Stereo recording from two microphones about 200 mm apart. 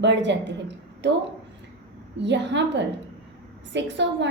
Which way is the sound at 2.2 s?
60° right (ahead or behind).